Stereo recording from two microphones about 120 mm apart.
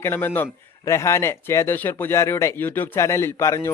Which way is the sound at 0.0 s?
20° left (ahead or behind).